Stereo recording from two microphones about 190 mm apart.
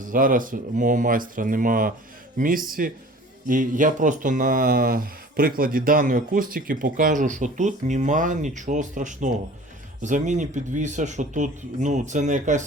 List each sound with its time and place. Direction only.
0.0 s speech: 45° right (ahead or behind)